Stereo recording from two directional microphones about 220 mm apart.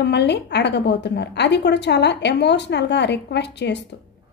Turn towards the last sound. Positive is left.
turn(degrees=50)  # may be behind; listen again after turning